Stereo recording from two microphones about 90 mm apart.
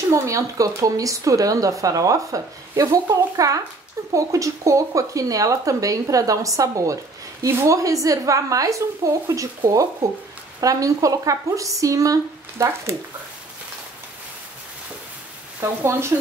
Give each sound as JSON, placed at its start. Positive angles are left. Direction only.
{"t": 0.1, "sound": "speech", "side_deg": -35}
{"t": 10.6, "sound": "speech", "side_deg": -40}
{"t": 15.6, "sound": "speech", "side_deg": -30}